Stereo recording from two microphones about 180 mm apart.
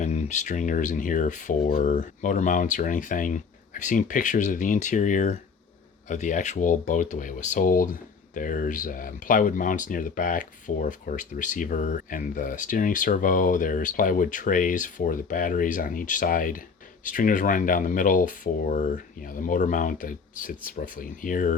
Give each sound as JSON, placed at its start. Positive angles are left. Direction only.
{"t": 0.0, "sound": "speech", "side_deg": 40}